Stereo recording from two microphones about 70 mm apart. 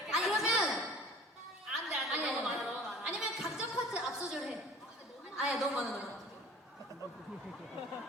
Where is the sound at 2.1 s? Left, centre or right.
Centre.